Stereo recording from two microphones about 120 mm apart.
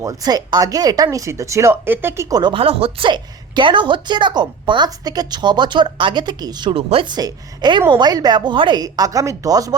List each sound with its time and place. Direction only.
0.0 s speech: 30° right (ahead or behind)
2.3 s a woman's voice: 35° right (ahead or behind)
2.6 s a woman's voice: 50° right (ahead or behind); by 6.7 s 35° right (ahead or behind)
6.7 s a woman's voice: 50° right (ahead or behind); by 9.7 s 30° right (ahead or behind)